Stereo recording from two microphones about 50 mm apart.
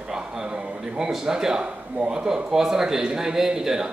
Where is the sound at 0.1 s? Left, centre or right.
Centre.